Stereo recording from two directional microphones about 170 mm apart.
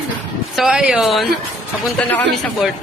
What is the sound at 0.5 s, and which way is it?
Speech, 5° right (ahead or behind).